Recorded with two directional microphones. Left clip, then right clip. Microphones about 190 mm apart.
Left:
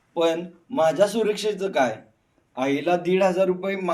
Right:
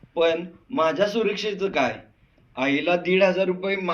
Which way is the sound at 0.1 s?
65° left (ahead or behind).